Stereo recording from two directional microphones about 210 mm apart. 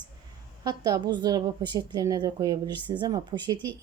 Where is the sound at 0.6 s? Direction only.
20° right (ahead or behind).